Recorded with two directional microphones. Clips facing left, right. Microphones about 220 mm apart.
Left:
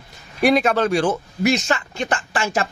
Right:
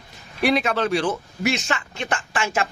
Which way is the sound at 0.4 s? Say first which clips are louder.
Left 4 dB; 45° left (ahead or behind).